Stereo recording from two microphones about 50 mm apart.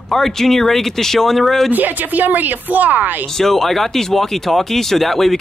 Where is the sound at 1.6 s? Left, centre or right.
Right.